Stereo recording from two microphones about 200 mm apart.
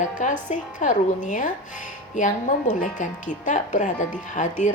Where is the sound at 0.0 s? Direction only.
40° left (ahead or behind).